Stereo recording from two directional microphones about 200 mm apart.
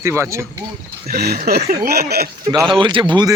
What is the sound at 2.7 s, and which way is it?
Speech, 25° right (ahead or behind).